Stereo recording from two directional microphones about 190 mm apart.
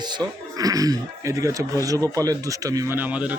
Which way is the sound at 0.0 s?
20° right (ahead or behind).